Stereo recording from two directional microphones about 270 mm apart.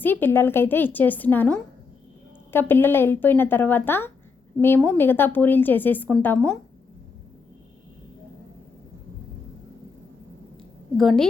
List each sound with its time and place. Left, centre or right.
0.0 s a woman's voice: centre
10.9 s a woman's voice: centre